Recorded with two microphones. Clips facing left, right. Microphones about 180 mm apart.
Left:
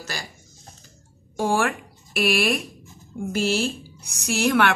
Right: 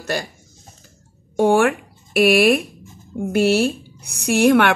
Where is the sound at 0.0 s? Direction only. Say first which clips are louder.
Right 10 dB; 55° right (ahead or behind).